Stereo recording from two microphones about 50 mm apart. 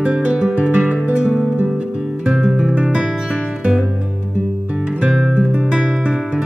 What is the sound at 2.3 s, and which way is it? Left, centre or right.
Music, centre.